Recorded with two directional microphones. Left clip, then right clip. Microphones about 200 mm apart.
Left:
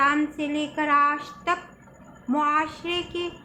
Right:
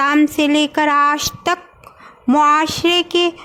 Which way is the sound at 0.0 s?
55° right (ahead or behind).